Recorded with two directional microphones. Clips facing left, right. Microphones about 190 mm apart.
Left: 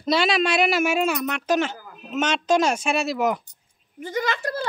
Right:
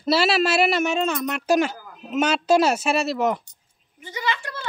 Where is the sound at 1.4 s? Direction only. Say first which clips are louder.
Right 5 dB; 10° right (ahead or behind).